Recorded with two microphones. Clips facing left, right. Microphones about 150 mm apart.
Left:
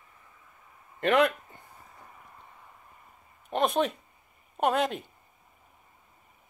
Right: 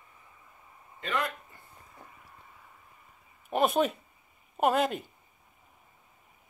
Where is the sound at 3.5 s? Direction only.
5° right (ahead or behind).